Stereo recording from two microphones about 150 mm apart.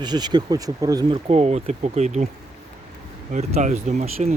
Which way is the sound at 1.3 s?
45° right (ahead or behind).